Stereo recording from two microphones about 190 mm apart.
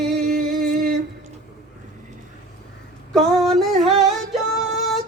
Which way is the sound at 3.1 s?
Centre (ahead or behind).